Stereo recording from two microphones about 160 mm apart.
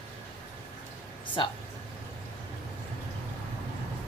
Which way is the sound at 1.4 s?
30° left (ahead or behind).